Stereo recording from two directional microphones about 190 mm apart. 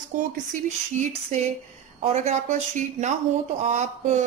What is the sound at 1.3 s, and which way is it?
A woman's voice, 35° right (ahead or behind).